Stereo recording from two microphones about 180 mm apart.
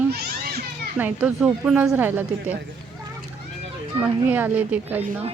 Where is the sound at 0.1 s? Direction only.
65° right (ahead or behind).